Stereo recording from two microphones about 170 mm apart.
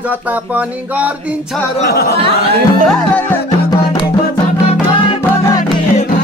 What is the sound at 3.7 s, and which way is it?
Music, 25° left (ahead or behind).